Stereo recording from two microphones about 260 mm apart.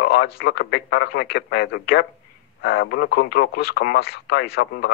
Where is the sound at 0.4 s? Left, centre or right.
Left.